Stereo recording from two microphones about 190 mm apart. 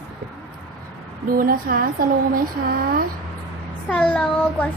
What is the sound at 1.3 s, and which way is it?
Speech, 50° right (ahead or behind).